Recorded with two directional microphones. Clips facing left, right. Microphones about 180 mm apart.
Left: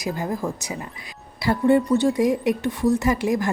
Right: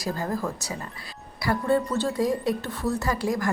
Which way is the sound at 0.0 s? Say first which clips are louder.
Left 2 dB; 15° left (ahead or behind).